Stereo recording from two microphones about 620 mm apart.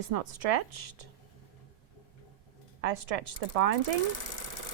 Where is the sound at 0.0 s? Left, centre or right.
Right.